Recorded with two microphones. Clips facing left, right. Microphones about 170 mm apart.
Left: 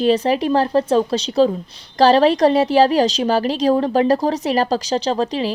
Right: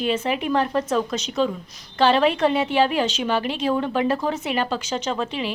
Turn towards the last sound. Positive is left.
turn(degrees=35)  # may be behind; listen again after turning